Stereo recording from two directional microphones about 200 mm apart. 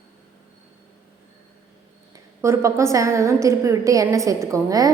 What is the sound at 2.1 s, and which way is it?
A woman's voice, 15° right (ahead or behind).